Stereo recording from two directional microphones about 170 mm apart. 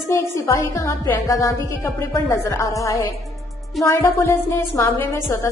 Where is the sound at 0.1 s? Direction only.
15° left (ahead or behind).